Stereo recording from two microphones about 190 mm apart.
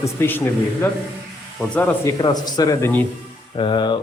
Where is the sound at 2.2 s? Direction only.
20° left (ahead or behind).